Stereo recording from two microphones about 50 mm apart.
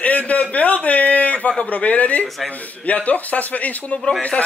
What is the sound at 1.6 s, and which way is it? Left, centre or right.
A man's voice, left.